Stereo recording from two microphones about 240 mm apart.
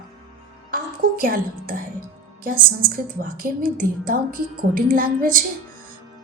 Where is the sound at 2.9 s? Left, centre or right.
Right.